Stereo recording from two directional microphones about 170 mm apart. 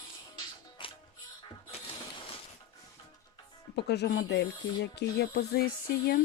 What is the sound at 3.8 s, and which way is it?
Speech, 75° left (ahead or behind).